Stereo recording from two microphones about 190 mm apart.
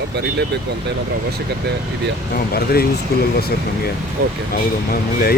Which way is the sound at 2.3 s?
55° left (ahead or behind).